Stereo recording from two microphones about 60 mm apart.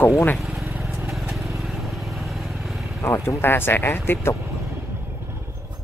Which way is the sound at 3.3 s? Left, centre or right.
Left.